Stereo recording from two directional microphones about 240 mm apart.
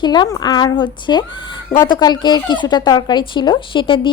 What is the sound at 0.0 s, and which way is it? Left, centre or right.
Speech, centre.